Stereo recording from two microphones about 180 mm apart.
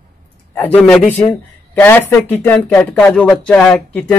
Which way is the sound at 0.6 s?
5° left (ahead or behind).